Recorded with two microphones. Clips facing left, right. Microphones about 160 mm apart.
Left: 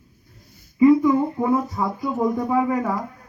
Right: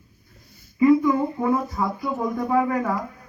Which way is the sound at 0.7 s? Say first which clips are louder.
Left 2 dB; 20° left (ahead or behind).